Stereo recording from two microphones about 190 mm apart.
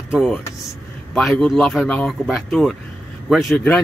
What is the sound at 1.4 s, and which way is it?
A man's voice, centre (ahead or behind).